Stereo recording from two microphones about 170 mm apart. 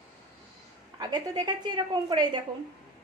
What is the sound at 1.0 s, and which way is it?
A woman's voice, 25° right (ahead or behind).